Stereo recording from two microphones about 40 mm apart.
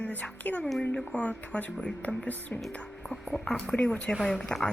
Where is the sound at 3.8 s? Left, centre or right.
Left.